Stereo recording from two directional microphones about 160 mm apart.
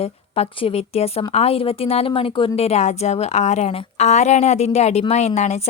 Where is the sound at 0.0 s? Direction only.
40° left (ahead or behind).